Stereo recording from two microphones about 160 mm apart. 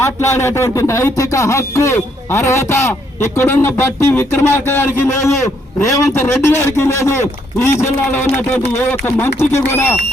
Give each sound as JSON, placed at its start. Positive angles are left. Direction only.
{"t": 0.0, "sound": "speech", "side_deg": 15}